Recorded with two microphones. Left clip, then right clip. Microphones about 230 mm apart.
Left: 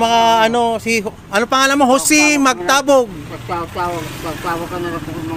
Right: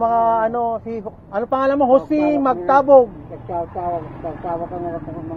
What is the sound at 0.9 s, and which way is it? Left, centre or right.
Speech, left.